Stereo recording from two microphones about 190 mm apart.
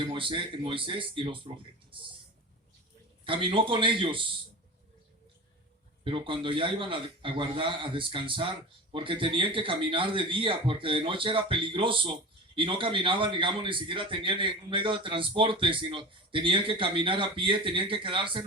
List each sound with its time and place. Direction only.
0.0 s a man's voice: 25° right (ahead or behind)
3.2 s a man's voice: 25° right (ahead or behind)
6.1 s a man's voice: 25° right (ahead or behind)